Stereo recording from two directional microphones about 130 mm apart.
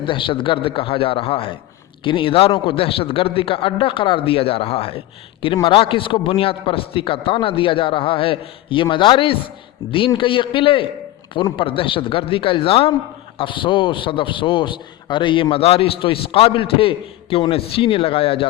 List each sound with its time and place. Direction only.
0.0 s a man's voice: 40° left (ahead or behind)